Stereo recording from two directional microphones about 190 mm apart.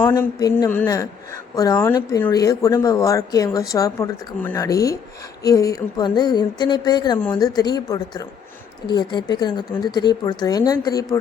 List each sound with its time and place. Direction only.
0.1 s speech: 20° left (ahead or behind)